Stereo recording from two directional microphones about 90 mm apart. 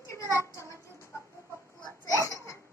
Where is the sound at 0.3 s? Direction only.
35° left (ahead or behind).